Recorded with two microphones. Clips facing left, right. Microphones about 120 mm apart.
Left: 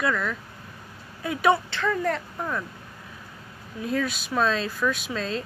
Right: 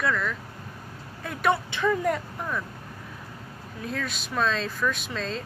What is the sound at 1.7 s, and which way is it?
Speech, 15° right (ahead or behind).